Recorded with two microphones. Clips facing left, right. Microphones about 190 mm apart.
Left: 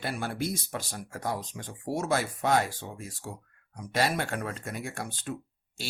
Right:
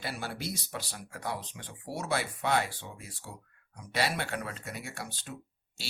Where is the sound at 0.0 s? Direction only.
50° left (ahead or behind).